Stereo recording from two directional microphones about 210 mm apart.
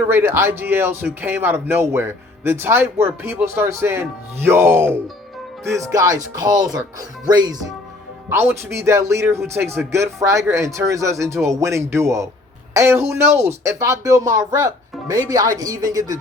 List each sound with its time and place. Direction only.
0.1 s speech: 10° right (ahead or behind)